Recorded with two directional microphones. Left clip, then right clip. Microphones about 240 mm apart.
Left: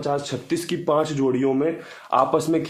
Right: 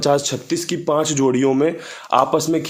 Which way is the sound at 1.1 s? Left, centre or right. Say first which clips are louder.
Right 4 dB; right.